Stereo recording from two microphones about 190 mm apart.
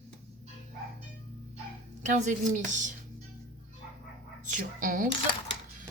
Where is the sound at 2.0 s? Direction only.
40° right (ahead or behind).